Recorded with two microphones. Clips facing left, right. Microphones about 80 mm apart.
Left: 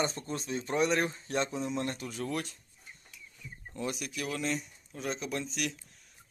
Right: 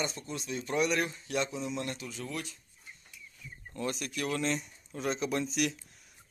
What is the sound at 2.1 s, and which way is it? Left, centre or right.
Speech, left.